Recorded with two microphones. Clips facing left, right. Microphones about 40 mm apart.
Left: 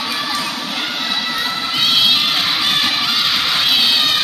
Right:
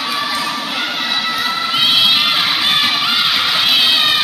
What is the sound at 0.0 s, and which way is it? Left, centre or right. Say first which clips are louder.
Children shouting: right 2 dB; centre.